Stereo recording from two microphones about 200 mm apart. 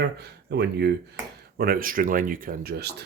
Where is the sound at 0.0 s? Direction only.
55° right (ahead or behind).